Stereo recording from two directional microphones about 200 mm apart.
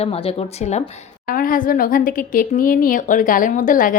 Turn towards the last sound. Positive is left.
turn(degrees=40)  # may be behind; listen again after turning